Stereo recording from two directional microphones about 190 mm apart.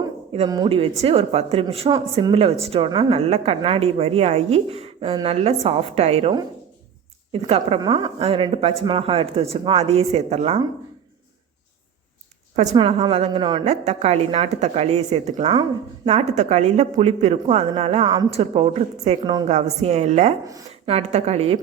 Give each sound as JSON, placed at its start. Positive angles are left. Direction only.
{"t": 0.3, "sound": "a woman's voice", "side_deg": -25}
{"t": 7.4, "sound": "a woman's voice", "side_deg": -30}
{"t": 12.5, "sound": "a woman's voice", "side_deg": -30}